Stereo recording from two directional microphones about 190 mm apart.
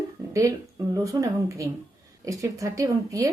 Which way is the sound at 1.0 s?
15° right (ahead or behind).